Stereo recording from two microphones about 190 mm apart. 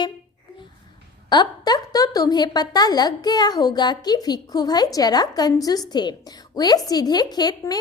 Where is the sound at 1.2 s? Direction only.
20° left (ahead or behind).